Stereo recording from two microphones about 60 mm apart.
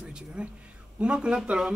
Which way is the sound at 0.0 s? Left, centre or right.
Centre.